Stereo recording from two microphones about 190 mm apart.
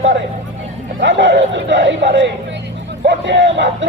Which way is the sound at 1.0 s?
75° right (ahead or behind).